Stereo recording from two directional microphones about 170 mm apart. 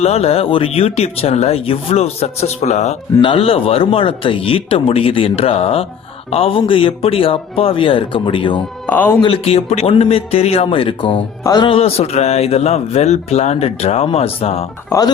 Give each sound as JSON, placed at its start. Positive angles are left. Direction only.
{"t": 0.0, "sound": "speech", "side_deg": 35}
{"t": 3.2, "sound": "speech", "side_deg": 30}
{"t": 8.9, "sound": "speech", "side_deg": 10}
{"t": 9.2, "sound": "speech", "side_deg": 35}
{"t": 14.8, "sound": "speech", "side_deg": 20}